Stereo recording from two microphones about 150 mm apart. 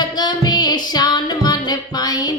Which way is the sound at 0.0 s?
30° left (ahead or behind).